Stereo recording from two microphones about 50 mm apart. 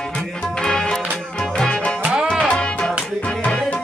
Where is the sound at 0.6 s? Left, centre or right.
Centre.